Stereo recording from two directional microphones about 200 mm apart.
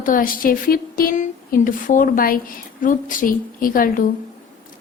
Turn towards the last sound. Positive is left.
turn(degrees=45)  # may be behind; listen again after turning